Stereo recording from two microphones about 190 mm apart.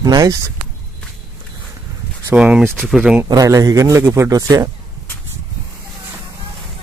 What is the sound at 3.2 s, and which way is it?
Speech, 20° right (ahead or behind).